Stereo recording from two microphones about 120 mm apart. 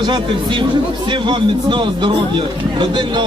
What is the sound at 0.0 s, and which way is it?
A man's voice, 40° right (ahead or behind).